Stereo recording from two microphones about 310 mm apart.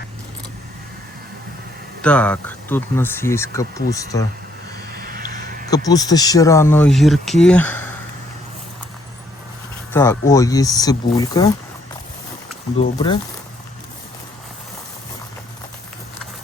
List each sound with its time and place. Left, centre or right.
2.0 s speech: centre
4.9 s a sound: right
5.7 s speech: centre
9.9 s speech: centre
12.8 s speech: centre